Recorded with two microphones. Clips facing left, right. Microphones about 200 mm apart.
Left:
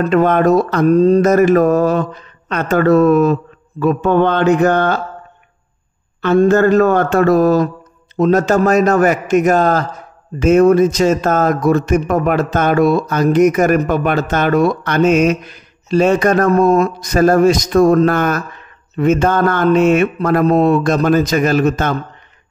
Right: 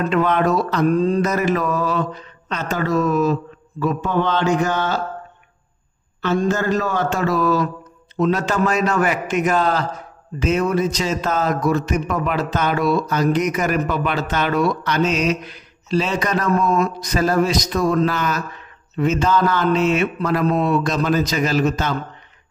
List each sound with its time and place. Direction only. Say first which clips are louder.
0.0 s speech: left 6 dB; 45° left (ahead or behind)
6.2 s speech: left 9 dB; 55° left (ahead or behind)